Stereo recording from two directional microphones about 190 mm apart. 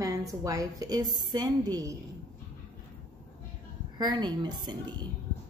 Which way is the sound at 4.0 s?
25° right (ahead or behind).